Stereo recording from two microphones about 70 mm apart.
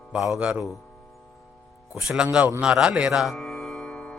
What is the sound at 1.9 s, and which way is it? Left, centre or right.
A man's voice, centre.